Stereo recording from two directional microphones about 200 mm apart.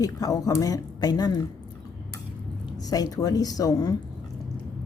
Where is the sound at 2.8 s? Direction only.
20° left (ahead or behind).